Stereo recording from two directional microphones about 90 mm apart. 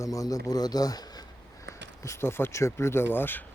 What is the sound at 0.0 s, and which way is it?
Speech, 40° left (ahead or behind).